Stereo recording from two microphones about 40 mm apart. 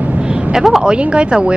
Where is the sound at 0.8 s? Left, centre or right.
Right.